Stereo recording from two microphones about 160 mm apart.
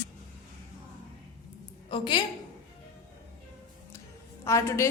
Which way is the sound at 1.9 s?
30° left (ahead or behind).